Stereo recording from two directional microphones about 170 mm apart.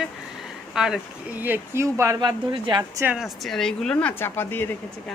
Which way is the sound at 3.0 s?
5° right (ahead or behind).